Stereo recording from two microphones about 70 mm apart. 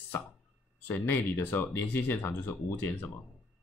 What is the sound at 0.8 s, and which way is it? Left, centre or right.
Speech, left.